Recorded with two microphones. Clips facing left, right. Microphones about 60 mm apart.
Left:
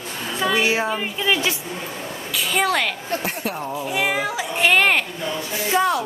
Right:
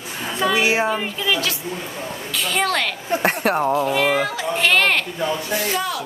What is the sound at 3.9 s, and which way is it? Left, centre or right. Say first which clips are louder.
Speech: right 3 dB; centre.